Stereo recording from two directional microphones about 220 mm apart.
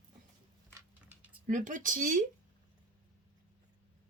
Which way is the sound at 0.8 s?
5° right (ahead or behind).